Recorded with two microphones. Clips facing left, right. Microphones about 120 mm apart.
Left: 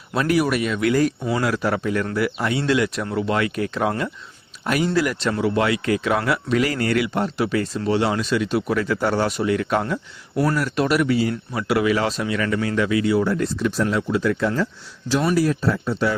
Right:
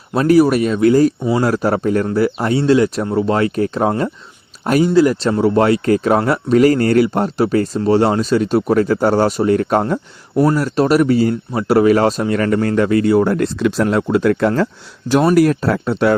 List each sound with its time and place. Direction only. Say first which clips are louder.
0.1 s speech: right 8 dB; 35° right (ahead or behind); by 13.8 s 80° right
13.8 s speech: right 7 dB; 55° right (ahead or behind)